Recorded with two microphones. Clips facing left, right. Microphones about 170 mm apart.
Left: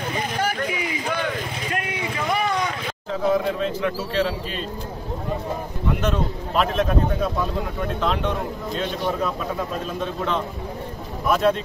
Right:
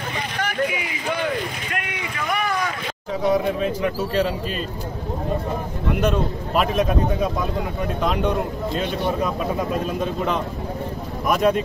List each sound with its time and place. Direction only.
1.7 s a sound: 30° left (ahead or behind)
3.1 s speech: 10° right (ahead or behind)
5.9 s speech: 10° right (ahead or behind)
8.0 s speech: 10° right (ahead or behind)
11.2 s speech: 10° right (ahead or behind)